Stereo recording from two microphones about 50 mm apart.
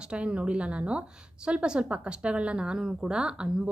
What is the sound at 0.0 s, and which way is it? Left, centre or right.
A woman's voice, centre.